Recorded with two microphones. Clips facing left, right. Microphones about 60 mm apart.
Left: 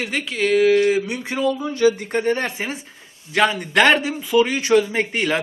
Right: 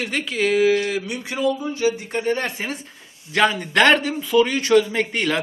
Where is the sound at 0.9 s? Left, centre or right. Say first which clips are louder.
Left 4 dB; left.